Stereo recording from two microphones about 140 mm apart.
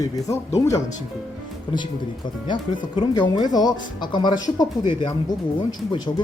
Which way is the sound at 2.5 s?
35° left (ahead or behind).